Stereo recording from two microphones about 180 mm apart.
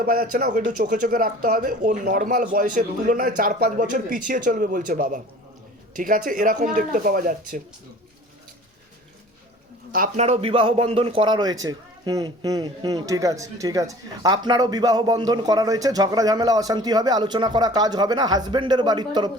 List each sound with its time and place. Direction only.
0.0 s speech: 55° right (ahead or behind)
10.2 s a man's voice: 35° right (ahead or behind)